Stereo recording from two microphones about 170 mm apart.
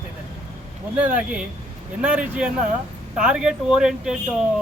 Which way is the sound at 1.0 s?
10° right (ahead or behind).